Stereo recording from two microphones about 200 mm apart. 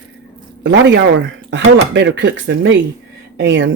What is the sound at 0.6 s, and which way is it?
Speech, 65° right (ahead or behind).